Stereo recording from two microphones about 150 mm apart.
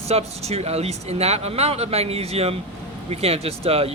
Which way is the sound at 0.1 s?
45° right (ahead or behind).